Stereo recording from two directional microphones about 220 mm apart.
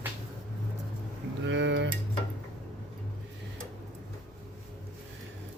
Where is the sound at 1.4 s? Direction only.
55° right (ahead or behind).